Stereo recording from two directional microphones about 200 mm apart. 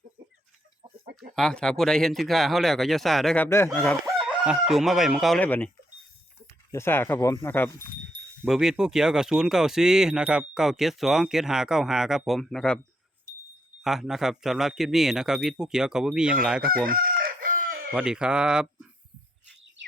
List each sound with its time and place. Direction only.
1.1 s speech: 5° left (ahead or behind)
8.4 s speech: centre (ahead or behind)
13.8 s speech: centre (ahead or behind)
16.8 s chicken: 45° right (ahead or behind)
17.9 s speech: 5° right (ahead or behind)